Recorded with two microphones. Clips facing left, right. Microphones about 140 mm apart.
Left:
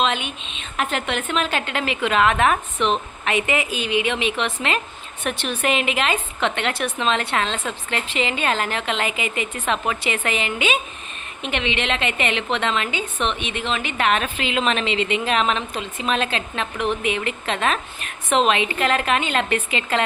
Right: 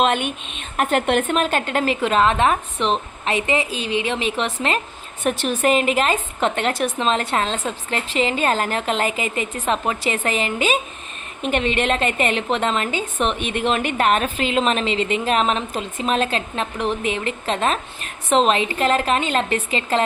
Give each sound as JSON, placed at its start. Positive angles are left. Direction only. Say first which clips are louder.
{"t": 0.0, "sound": "a woman's voice", "louder": "right 4 dB", "side_deg": -55}